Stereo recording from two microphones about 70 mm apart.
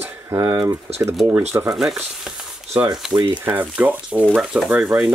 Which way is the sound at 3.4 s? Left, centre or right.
Right.